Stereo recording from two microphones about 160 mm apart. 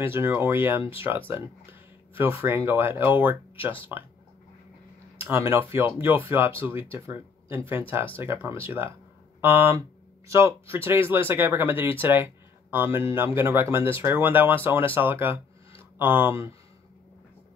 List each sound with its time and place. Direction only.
0.0 s speech: 15° right (ahead or behind)
5.2 s speech: 15° right (ahead or behind)